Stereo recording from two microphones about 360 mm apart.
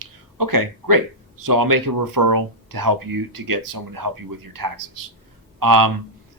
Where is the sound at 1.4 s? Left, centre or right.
Right.